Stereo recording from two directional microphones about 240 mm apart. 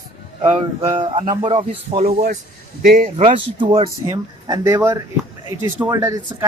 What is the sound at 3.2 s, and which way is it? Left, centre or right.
Speech, right.